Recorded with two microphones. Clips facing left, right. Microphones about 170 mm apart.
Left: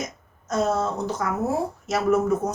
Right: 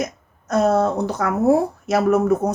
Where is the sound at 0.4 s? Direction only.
60° right (ahead or behind).